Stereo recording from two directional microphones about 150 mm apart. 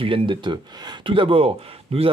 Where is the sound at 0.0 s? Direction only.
35° right (ahead or behind).